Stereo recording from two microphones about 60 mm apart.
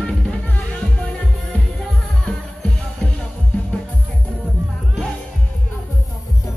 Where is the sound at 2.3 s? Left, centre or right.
Centre.